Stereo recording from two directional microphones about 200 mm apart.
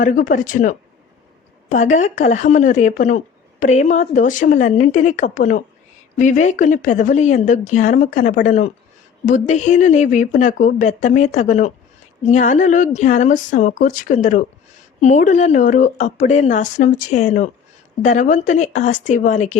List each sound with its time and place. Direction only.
0.0 s speech: 40° left (ahead or behind)